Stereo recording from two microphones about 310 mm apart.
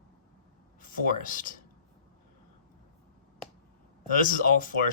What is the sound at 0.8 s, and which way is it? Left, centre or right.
Speech, left.